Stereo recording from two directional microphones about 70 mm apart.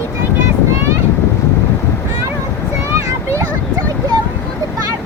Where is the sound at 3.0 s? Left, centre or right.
Right.